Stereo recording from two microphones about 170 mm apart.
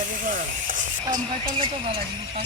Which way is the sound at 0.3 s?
50° right (ahead or behind).